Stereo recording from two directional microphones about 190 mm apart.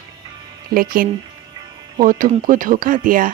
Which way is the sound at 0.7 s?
50° right (ahead or behind).